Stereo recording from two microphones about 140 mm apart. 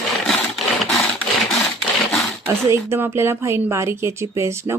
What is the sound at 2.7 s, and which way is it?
Speech, 15° right (ahead or behind).